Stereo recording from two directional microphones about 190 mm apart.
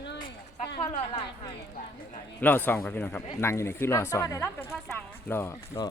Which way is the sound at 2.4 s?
10° left (ahead or behind).